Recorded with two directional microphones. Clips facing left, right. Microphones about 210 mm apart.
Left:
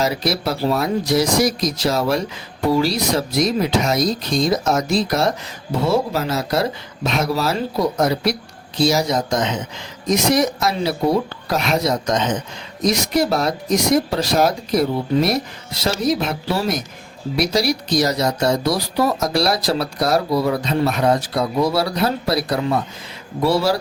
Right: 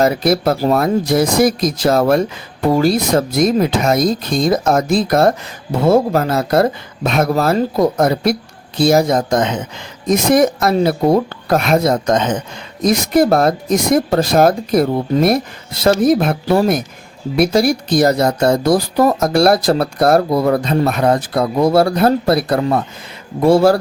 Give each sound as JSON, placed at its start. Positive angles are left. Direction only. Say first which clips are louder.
{"t": 0.0, "sound": "speech", "louder": "right 7 dB", "side_deg": -50}